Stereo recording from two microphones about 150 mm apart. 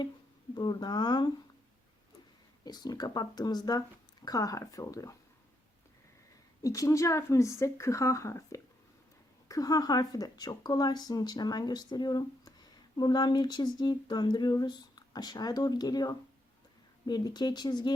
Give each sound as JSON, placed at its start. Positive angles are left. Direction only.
{"t": 0.5, "sound": "speech", "side_deg": 30}
{"t": 2.6, "sound": "speech", "side_deg": 25}
{"t": 6.6, "sound": "speech", "side_deg": 20}